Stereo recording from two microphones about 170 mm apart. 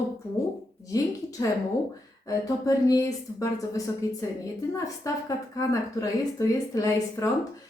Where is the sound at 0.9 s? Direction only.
20° left (ahead or behind).